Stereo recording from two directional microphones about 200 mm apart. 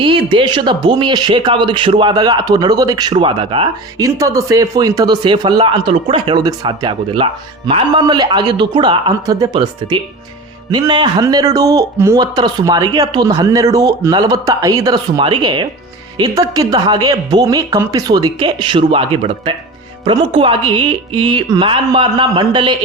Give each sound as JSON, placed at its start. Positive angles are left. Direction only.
{"t": 0.0, "sound": "a man's voice", "side_deg": -25}